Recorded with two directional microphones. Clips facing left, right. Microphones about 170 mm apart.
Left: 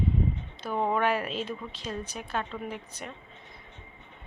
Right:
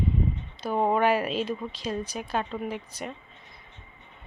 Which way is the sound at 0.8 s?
15° right (ahead or behind).